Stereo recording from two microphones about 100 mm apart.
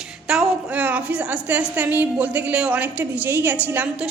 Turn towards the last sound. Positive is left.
turn(degrees=-15)  # may be behind; listen again after turning